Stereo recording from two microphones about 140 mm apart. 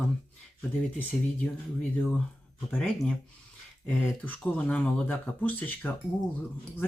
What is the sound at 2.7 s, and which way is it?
Speech, 5° left (ahead or behind).